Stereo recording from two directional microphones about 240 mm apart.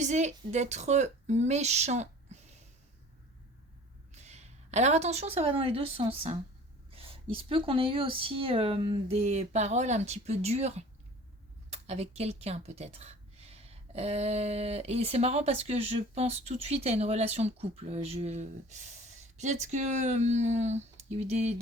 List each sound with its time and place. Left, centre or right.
0.0 s speech: right
4.1 s a woman's voice: right